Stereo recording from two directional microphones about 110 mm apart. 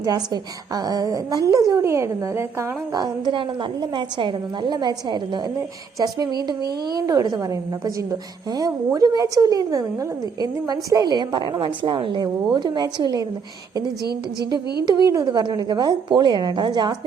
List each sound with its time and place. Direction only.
0.7 s a woman's voice: 35° right (ahead or behind)
3.0 s a woman's voice: 45° right (ahead or behind)
8.5 s a woman's voice: 35° right (ahead or behind)
14.5 s a woman's voice: 40° right (ahead or behind)